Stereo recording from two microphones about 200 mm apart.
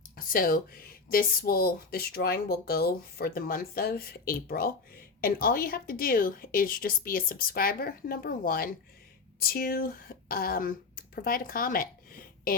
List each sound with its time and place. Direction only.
0.2 s speech: 45° left (ahead or behind)